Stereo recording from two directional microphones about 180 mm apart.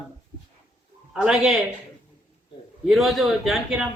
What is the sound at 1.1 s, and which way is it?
Speech, 5° right (ahead or behind).